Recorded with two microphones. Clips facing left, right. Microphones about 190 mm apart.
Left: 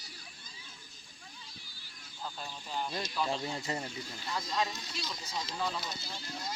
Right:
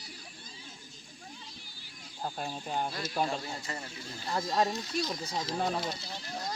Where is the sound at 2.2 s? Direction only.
50° right (ahead or behind).